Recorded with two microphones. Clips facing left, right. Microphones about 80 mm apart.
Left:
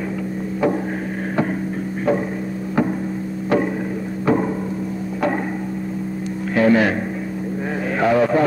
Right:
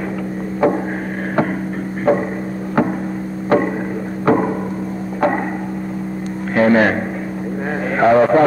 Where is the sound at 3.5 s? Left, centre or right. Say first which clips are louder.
Right 4 dB; right.